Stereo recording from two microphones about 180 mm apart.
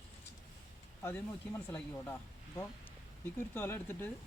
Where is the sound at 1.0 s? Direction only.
15° left (ahead or behind).